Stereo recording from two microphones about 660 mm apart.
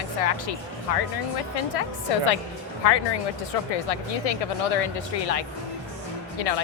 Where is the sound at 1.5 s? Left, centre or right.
Left.